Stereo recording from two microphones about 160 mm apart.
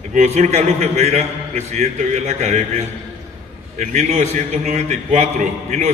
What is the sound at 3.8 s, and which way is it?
A man's voice, 45° right (ahead or behind).